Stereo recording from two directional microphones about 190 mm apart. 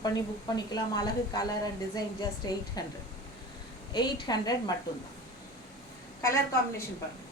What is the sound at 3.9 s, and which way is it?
Speech, 20° left (ahead or behind).